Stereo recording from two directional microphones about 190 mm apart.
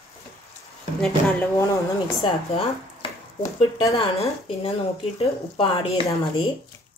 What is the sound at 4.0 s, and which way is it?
A woman's voice, 30° left (ahead or behind).